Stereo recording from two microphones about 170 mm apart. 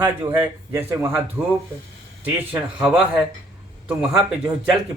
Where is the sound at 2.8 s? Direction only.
5° right (ahead or behind).